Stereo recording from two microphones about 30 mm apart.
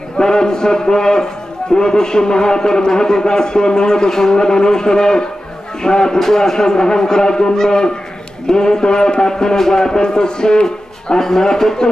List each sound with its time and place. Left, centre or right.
0.2 s a man's voice: left
11.1 s a man's voice: centre